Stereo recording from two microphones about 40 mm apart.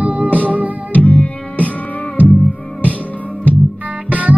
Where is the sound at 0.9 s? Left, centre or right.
Left.